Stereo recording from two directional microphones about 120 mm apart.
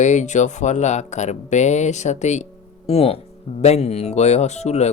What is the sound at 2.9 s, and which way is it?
Speech, 55° left (ahead or behind).